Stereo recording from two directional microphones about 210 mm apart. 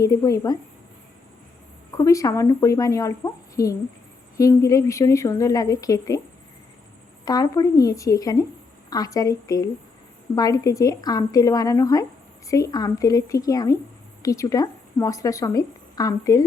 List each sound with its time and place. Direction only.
0.0 s a woman's voice: 15° left (ahead or behind)
2.0 s a woman's voice: 15° left (ahead or behind)
7.3 s a woman's voice: 15° left (ahead or behind)